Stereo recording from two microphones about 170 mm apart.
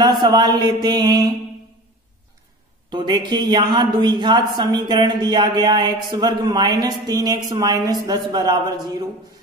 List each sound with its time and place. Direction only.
0.0 s speech: 25° right (ahead or behind)
2.9 s speech: 25° right (ahead or behind)